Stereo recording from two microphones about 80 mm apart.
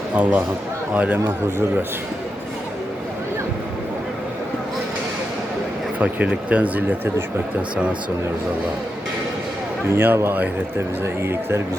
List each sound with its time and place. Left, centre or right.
0.1 s speech: centre
6.0 s speech: centre
9.9 s speech: right